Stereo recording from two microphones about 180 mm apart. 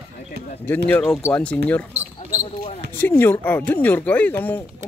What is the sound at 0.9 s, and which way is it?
Speech, 10° left (ahead or behind).